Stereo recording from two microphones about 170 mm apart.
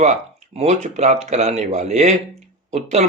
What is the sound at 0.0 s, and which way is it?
A man's voice, 40° right (ahead or behind).